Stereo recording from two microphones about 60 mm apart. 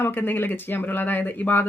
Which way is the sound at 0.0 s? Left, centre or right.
Left.